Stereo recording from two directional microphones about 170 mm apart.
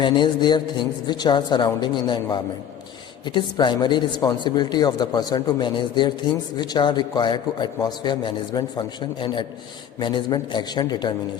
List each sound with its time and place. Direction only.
0.0 s a man's voice: 25° left (ahead or behind)